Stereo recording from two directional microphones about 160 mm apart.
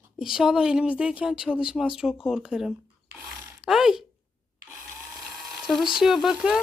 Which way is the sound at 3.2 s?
5° right (ahead or behind).